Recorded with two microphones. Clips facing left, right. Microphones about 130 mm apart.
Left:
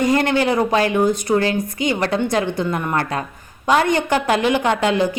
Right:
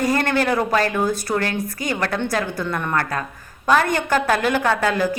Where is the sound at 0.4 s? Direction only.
20° left (ahead or behind).